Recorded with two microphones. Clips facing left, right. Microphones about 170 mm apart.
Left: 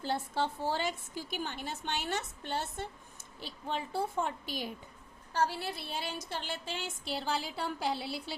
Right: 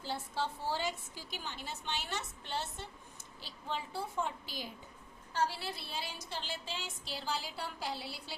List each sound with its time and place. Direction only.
0.0 s a woman's voice: 55° left (ahead or behind)